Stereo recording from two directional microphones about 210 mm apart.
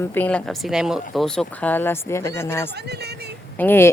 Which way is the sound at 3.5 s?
10° left (ahead or behind).